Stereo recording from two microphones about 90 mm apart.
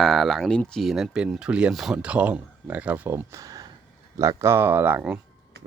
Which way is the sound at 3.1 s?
30° right (ahead or behind).